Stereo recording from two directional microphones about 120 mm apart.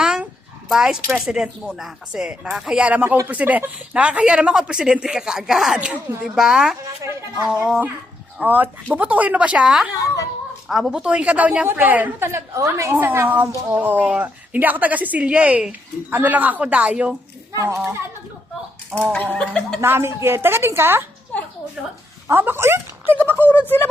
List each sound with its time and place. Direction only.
0.0 s dog: 5° right (ahead or behind)
0.7 s a woman's voice: 5° right (ahead or behind)
17.5 s a woman's voice: 25° right (ahead or behind)
19.1 s a sound: 15° left (ahead or behind)
19.8 s a woman's voice: 20° right (ahead or behind)
22.3 s a woman's voice: 20° right (ahead or behind)
23.5 s a sound: 15° left (ahead or behind)